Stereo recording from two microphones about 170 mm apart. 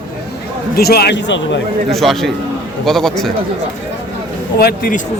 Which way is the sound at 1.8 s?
Centre (ahead or behind).